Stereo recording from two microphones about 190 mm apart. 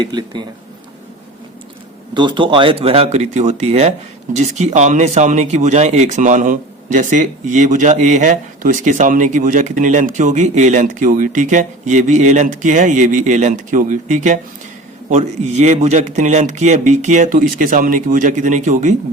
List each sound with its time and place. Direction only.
0.0 s speech: 20° right (ahead or behind)
2.1 s speech: 25° right (ahead or behind)